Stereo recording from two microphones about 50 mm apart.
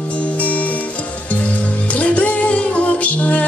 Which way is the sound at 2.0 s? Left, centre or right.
Left.